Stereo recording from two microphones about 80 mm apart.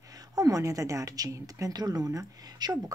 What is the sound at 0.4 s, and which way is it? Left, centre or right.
Speech, right.